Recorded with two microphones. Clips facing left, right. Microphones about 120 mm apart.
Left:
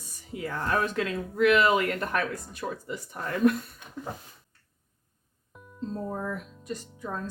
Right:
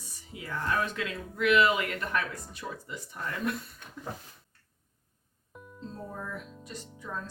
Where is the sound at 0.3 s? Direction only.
45° left (ahead or behind).